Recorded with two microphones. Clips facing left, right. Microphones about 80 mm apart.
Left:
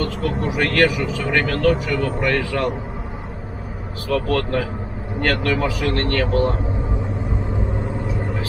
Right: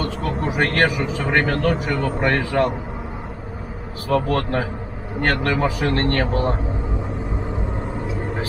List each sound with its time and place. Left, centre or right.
0.0 s speech: right
4.1 s speech: right